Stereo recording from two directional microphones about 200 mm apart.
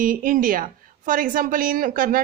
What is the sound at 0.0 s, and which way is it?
A woman's voice, 45° right (ahead or behind).